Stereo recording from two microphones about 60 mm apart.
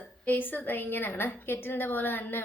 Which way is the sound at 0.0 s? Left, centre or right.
Left.